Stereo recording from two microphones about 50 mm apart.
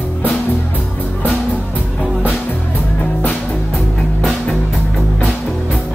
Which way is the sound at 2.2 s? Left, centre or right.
Left.